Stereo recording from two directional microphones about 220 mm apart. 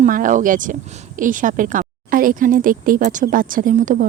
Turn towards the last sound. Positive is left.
turn(degrees=-35)  # may be behind; listen again after turning